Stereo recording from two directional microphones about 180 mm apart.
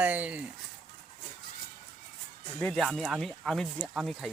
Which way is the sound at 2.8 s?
Centre (ahead or behind).